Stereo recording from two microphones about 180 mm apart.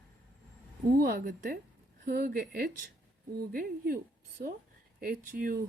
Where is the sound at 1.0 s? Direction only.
55° right (ahead or behind).